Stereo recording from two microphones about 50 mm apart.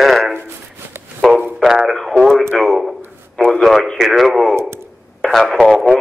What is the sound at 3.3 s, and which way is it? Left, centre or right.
Speech, centre.